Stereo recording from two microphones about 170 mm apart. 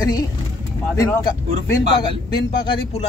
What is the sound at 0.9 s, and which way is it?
Speech, 20° left (ahead or behind).